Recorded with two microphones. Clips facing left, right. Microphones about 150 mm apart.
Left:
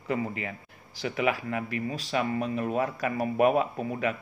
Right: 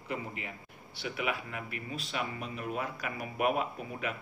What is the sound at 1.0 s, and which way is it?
Speech, 90° left.